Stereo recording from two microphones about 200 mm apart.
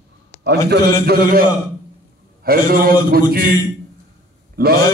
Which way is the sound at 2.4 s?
50° right (ahead or behind).